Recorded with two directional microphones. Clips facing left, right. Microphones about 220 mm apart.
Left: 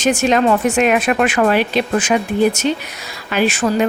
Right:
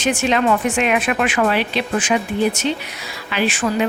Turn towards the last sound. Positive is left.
turn(degrees=40)  # may be behind; listen again after turning